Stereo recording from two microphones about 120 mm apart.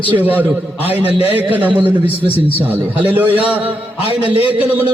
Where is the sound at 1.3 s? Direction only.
15° right (ahead or behind).